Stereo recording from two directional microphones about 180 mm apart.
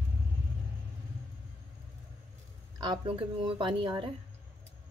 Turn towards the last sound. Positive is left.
turn(degrees=-25)  # may be behind; listen again after turning